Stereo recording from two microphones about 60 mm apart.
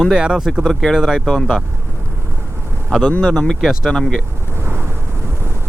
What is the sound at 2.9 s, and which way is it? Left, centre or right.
Speech, centre.